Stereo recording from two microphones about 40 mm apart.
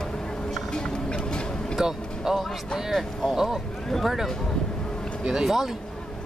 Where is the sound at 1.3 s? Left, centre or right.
Left.